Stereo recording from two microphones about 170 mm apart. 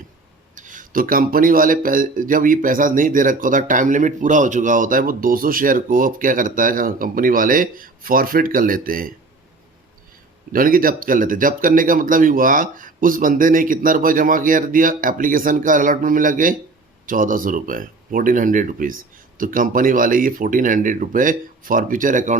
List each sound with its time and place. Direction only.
0.5 s speech: 50° right (ahead or behind)
10.5 s speech: 55° right (ahead or behind)